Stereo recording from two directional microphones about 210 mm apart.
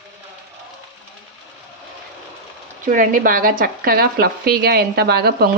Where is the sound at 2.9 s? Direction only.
40° right (ahead or behind).